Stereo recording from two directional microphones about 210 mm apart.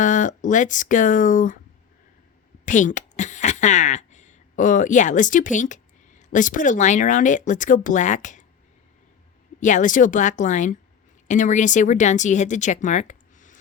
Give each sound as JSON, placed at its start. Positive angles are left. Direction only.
{"t": 0.0, "sound": "speech", "side_deg": 35}
{"t": 2.6, "sound": "speech", "side_deg": 35}
{"t": 9.6, "sound": "speech", "side_deg": 35}